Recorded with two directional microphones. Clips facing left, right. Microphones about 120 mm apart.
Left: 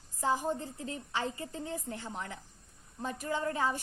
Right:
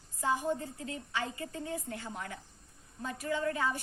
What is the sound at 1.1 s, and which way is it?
A woman's voice, 30° left (ahead or behind).